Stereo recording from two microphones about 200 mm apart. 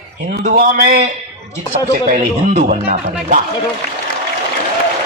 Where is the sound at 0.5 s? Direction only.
40° right (ahead or behind).